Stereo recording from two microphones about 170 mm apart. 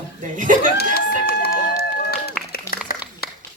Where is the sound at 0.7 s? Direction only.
65° left (ahead or behind).